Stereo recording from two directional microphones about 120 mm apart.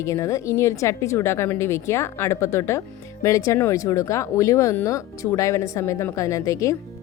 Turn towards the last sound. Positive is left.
turn(degrees=25)  # may be behind; listen again after turning